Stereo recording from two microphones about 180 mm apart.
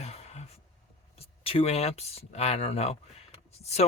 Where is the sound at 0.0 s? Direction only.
35° left (ahead or behind).